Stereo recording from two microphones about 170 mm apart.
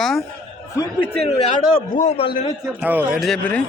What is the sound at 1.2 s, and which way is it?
A man's voice, 40° left (ahead or behind).